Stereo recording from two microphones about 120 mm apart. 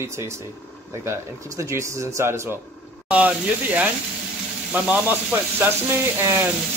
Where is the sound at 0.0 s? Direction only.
20° right (ahead or behind).